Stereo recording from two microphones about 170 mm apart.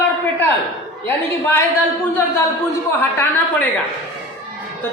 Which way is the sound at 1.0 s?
10° left (ahead or behind).